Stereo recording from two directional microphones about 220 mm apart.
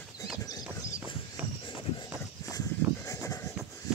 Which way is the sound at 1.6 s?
20° left (ahead or behind).